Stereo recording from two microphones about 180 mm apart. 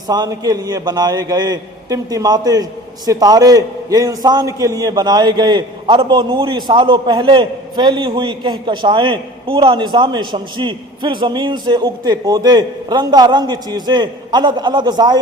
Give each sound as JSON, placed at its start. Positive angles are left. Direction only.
{"t": 0.1, "sound": "a man's voice", "side_deg": -20}